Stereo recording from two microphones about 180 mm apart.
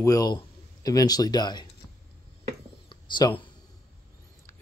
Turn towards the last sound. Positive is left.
turn(degrees=25)  # may be behind; listen again after turning